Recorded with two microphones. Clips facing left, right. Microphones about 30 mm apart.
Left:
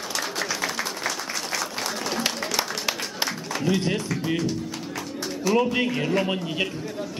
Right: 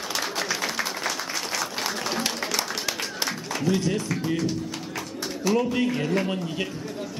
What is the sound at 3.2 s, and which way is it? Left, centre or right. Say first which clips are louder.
Music: left 1 dB; centre.